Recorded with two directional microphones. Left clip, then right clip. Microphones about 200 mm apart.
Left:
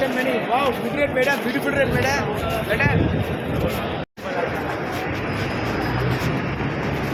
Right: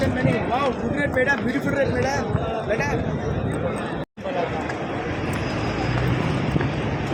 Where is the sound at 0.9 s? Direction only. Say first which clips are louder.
Left 1 dB; 40° right (ahead or behind).